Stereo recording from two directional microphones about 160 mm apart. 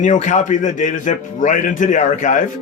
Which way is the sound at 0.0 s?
50° left (ahead or behind).